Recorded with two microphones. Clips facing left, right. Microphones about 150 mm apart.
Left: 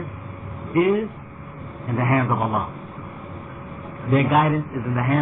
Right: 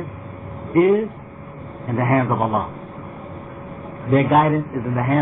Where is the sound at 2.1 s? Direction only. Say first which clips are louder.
Right 3 dB; 45° right (ahead or behind).